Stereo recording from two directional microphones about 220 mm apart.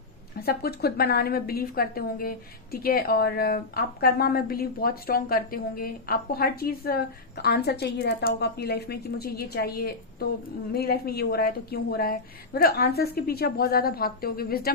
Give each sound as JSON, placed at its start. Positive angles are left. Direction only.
{"t": 0.4, "sound": "a woman's voice", "side_deg": 45}